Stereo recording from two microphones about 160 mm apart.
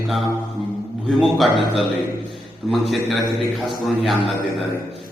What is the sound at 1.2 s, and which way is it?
Speech, centre (ahead or behind).